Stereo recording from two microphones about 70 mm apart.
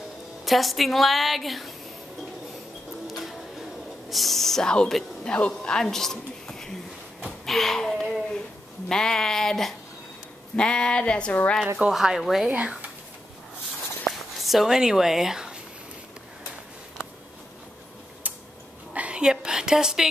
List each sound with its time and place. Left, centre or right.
0.5 s a woman's voice: centre
3.1 s printer: centre
4.1 s a woman's voice: centre
7.2 s a sound: centre
8.8 s speech: centre
11.9 s a woman's voice: centre
12.4 s speech: centre
14.0 s a sound: centre
18.2 s tick-tock: right
18.9 s speech: centre